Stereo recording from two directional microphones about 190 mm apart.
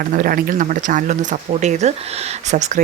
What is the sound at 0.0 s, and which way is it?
Speech, 45° right (ahead or behind).